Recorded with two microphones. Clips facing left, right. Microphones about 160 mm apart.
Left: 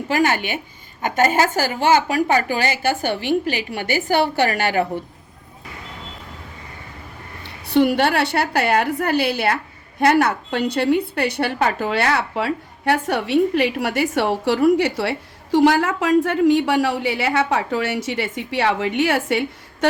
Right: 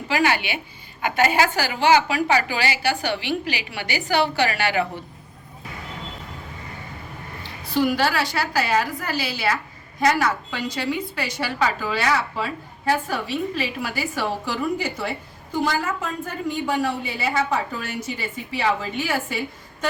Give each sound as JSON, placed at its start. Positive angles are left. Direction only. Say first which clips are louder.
{"t": 0.1, "sound": "a woman's voice", "louder": "left 2 dB", "side_deg": 45}
{"t": 7.4, "sound": "a woman's voice", "louder": "left 5 dB", "side_deg": 65}